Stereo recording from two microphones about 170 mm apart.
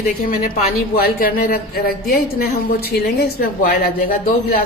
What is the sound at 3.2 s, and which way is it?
A woman's voice, 65° left (ahead or behind).